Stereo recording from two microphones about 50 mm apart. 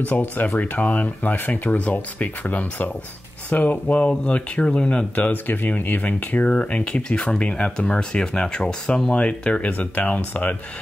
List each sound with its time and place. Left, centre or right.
0.0 s speech: left
1.0 s speech: left
5.1 s speech: left